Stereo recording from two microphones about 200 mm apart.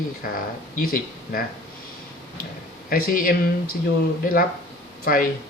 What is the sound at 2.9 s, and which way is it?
Speech, 45° left (ahead or behind).